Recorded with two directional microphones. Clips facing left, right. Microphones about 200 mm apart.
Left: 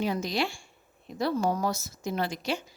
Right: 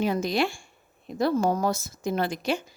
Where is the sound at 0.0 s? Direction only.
50° right (ahead or behind).